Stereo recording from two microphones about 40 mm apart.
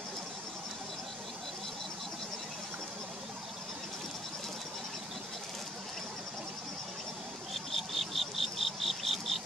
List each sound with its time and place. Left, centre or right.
7.5 s insect: centre